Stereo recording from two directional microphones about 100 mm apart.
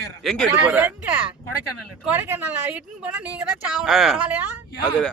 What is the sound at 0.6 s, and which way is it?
Speech, 15° right (ahead or behind).